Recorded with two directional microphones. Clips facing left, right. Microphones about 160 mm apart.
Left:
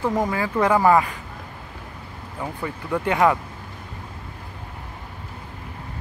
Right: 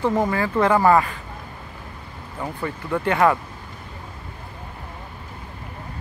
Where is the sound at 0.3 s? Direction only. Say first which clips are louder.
Right 1 dB; 10° left (ahead or behind).